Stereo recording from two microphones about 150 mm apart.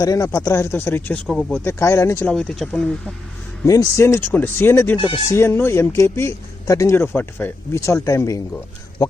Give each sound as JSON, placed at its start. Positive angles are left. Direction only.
{"t": 0.0, "sound": "speech", "side_deg": 20}
{"t": 1.6, "sound": "speech", "side_deg": 20}
{"t": 2.3, "sound": "speech", "side_deg": 5}
{"t": 3.7, "sound": "speech", "side_deg": 20}
{"t": 4.9, "sound": "speech", "side_deg": 35}
{"t": 5.3, "sound": "speech", "side_deg": 15}